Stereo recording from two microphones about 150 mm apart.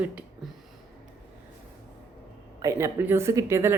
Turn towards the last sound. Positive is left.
turn(degrees=-20)  # may be behind; listen again after turning